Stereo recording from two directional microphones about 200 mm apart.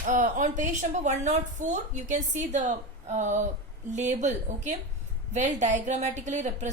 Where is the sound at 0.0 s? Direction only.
40° right (ahead or behind).